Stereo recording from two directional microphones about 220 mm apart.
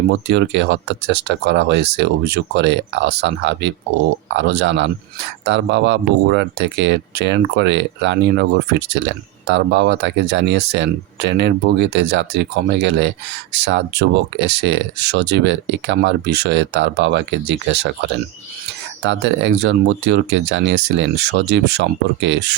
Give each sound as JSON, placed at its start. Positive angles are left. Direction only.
{"t": 0.3, "sound": "speech", "side_deg": -50}